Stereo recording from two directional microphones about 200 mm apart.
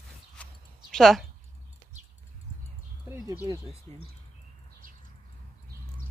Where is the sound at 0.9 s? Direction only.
Centre (ahead or behind).